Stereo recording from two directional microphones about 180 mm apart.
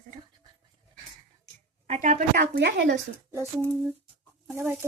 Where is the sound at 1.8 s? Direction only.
40° right (ahead or behind); by 2.9 s 75° right (ahead or behind).